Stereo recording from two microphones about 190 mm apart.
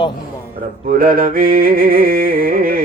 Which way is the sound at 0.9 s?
50° right (ahead or behind).